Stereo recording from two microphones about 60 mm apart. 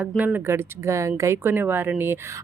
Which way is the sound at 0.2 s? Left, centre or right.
Right.